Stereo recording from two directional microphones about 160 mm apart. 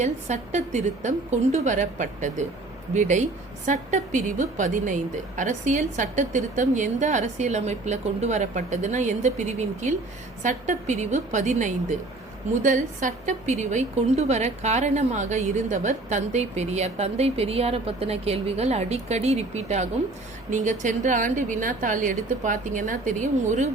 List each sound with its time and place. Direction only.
0.0 s a woman's voice: 45° right (ahead or behind)